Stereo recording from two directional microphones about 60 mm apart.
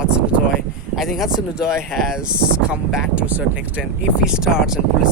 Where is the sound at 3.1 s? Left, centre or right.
Right.